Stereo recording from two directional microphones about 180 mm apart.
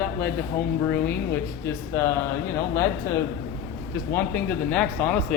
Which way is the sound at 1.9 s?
15° left (ahead or behind).